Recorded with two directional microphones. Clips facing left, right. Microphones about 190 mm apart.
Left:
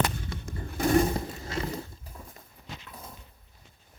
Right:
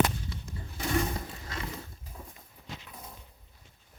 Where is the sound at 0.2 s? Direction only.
55° left (ahead or behind).